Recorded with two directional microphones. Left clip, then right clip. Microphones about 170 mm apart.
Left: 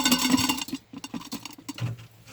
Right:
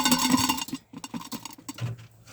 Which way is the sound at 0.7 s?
20° right (ahead or behind).